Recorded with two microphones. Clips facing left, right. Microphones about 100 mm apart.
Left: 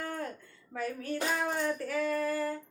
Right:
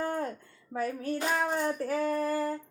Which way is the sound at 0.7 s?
35° right (ahead or behind).